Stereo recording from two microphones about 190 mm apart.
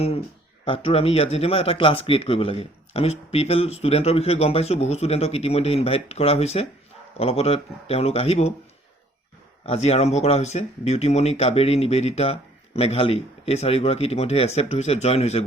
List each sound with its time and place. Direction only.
0.6 s speech: 30° left (ahead or behind)
9.6 s speech: 35° left (ahead or behind)